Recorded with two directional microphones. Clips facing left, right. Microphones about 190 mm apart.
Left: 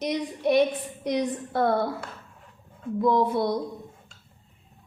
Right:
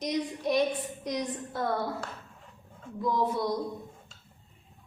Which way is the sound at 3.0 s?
65° left (ahead or behind).